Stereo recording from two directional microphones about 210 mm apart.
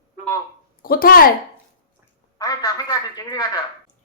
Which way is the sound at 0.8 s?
45° left (ahead or behind).